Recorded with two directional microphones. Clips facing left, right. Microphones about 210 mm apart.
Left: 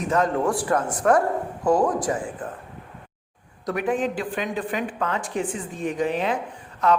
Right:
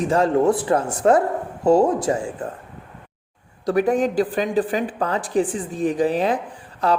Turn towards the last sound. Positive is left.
turn(degrees=-35)  # may be behind; listen again after turning